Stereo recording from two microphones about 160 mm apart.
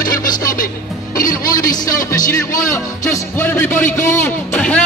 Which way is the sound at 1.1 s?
60° left (ahead or behind).